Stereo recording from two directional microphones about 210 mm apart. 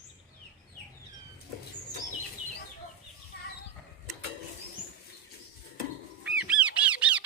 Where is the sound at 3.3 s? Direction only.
50° left (ahead or behind).